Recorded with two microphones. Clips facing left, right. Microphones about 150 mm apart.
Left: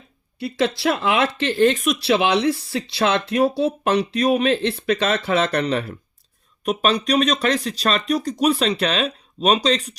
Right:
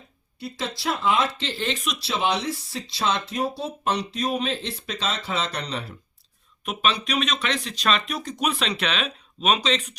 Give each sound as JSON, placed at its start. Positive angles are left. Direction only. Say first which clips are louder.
{"t": 0.3, "sound": "speech", "louder": "left 10 dB", "side_deg": 65}
{"t": 1.4, "sound": "speech", "louder": "left 12 dB", "side_deg": 55}
{"t": 6.7, "sound": "speech", "louder": "left 6 dB", "side_deg": 40}